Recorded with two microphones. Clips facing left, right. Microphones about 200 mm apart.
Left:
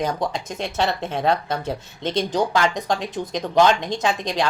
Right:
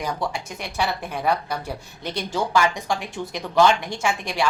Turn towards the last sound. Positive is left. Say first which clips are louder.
# left 3 dB
turn(degrees=20)  # may be behind; listen again after turning